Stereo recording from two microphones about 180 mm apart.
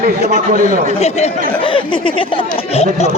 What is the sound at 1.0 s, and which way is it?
Speech, 35° left (ahead or behind).